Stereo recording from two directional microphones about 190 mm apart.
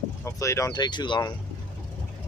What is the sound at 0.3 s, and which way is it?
Speech, 15° left (ahead or behind).